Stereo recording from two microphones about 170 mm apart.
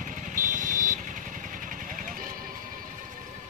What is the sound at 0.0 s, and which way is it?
Vehicle, 50° right (ahead or behind).